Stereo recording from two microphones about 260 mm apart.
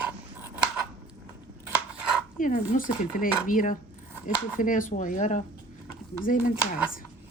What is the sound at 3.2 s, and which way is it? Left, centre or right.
Speech, left.